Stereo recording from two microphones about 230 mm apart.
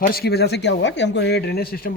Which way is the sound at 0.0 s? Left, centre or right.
Left.